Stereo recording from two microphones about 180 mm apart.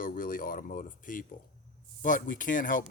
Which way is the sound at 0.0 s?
50° left (ahead or behind).